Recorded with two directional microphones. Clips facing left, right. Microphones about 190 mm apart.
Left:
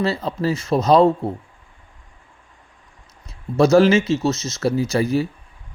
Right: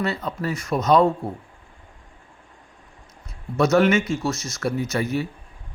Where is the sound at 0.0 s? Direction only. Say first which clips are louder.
Left 5 dB; 30° left (ahead or behind).